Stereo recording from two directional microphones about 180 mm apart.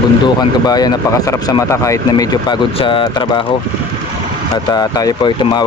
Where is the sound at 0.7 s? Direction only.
20° left (ahead or behind).